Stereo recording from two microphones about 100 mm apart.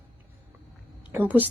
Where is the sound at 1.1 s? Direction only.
20° right (ahead or behind).